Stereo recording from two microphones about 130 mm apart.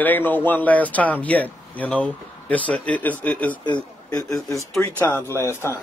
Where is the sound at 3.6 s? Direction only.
35° left (ahead or behind).